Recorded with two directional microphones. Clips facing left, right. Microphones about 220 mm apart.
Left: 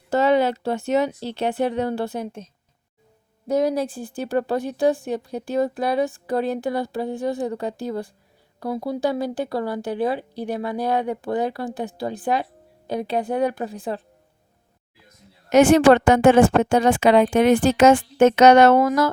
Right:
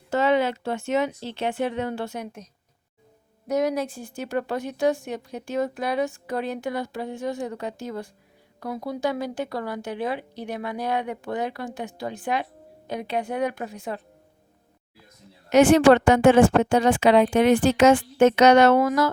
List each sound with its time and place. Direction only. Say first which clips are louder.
0.1 s a woman's voice: left 3 dB; 40° left (ahead or behind)
15.4 s a woman's voice: left 2 dB; 45° left (ahead or behind)